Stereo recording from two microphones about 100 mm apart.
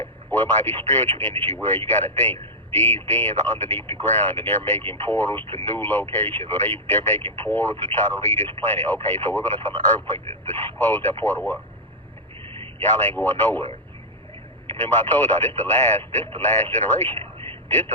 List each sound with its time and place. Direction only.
0.0 s speech: 20° left (ahead or behind)
12.8 s speech: 20° left (ahead or behind)
14.7 s speech: 20° left (ahead or behind)